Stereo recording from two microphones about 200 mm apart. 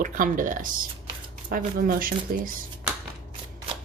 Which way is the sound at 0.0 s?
40° right (ahead or behind).